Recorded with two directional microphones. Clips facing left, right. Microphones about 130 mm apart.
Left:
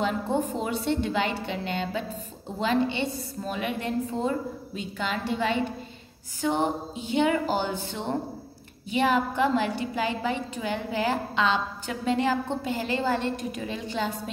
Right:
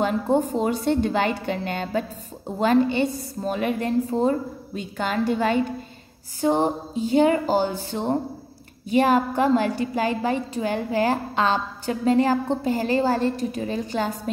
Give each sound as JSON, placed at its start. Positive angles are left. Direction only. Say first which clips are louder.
{"t": 0.0, "sound": "a woman's voice", "louder": "right 5 dB", "side_deg": -45}
{"t": 6.4, "sound": "a woman's voice", "louder": "right 5 dB", "side_deg": -35}